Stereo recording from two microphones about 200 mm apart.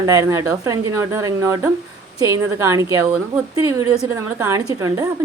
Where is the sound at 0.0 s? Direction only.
15° right (ahead or behind).